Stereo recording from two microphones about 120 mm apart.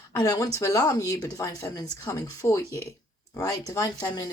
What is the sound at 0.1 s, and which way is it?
Speech, 30° left (ahead or behind).